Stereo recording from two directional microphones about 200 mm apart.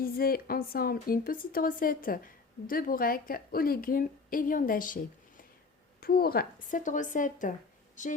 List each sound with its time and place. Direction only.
0.0 s speech: 50° left (ahead or behind)
6.0 s speech: 50° left (ahead or behind)